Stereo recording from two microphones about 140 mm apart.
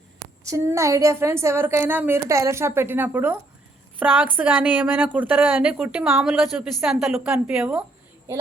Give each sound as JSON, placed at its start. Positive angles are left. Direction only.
{"t": 0.4, "sound": "a woman's voice", "side_deg": -20}